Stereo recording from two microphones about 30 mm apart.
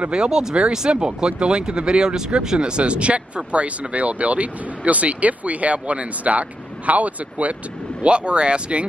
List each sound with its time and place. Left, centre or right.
0.1 s speech: right
2.6 s speech: right
8.0 s speech: right